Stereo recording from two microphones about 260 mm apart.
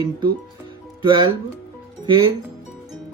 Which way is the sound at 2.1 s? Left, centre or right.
Centre.